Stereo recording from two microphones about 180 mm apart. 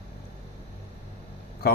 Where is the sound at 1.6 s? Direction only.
60° left (ahead or behind).